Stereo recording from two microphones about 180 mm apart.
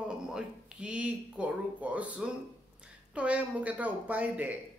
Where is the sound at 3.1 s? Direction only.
5° right (ahead or behind).